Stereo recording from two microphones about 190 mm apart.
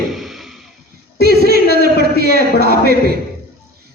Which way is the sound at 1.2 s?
55° right (ahead or behind).